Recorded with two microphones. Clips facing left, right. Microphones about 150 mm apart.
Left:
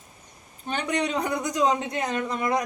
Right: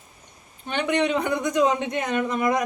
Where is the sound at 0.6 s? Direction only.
35° left (ahead or behind).